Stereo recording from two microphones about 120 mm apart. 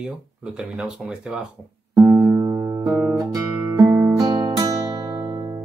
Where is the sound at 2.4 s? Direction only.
25° right (ahead or behind).